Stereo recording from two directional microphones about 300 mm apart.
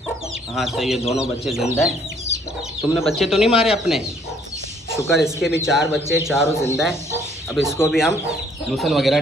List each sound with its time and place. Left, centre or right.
0.6 s speech: centre
2.8 s speech: centre